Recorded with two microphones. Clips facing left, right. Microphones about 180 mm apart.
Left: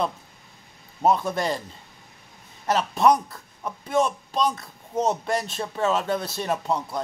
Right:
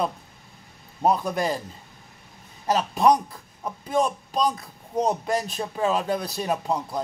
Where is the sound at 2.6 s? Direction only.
15° right (ahead or behind).